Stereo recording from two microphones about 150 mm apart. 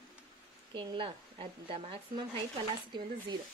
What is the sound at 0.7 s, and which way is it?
Speech, 35° right (ahead or behind).